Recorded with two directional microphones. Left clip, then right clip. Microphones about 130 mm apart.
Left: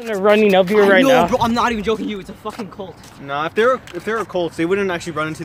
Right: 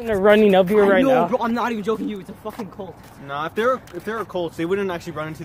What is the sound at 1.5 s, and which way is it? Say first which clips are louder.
Speech: left 5 dB; 75° left (ahead or behind).